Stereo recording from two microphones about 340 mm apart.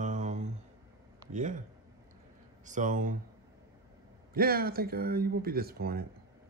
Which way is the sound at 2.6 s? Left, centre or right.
Right.